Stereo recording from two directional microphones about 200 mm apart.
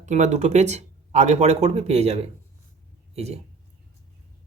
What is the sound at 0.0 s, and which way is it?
Speech, 35° right (ahead or behind).